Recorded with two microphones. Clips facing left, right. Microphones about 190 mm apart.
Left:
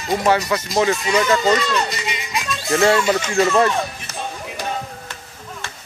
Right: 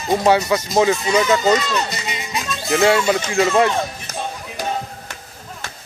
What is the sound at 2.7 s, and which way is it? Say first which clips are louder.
Speech: even; centre (ahead or behind).